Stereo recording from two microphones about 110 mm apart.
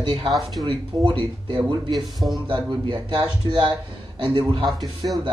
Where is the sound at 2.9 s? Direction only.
45° right (ahead or behind).